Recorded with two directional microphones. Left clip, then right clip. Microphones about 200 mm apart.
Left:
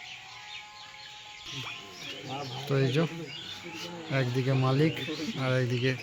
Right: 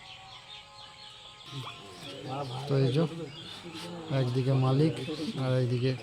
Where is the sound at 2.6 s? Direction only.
Centre (ahead or behind).